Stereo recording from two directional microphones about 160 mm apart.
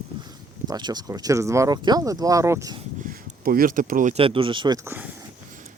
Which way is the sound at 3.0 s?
65° right (ahead or behind).